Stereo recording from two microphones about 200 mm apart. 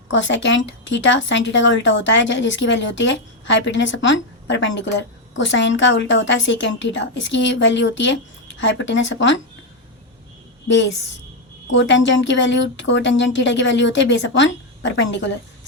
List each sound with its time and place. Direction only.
0.1 s speech: 65° left (ahead or behind)
11.7 s speech: 65° left (ahead or behind)